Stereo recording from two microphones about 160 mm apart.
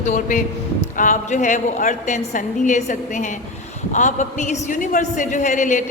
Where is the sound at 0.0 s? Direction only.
50° left (ahead or behind).